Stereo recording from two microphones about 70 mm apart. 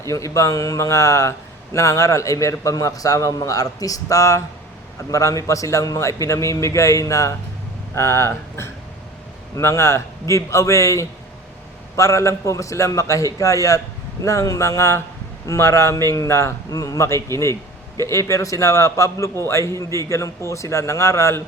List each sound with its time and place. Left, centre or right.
0.1 s a man's voice: left
16.7 s a man's voice: left